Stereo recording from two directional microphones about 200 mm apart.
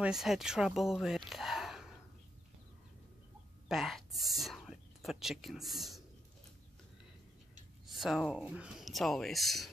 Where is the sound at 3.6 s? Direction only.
Centre (ahead or behind).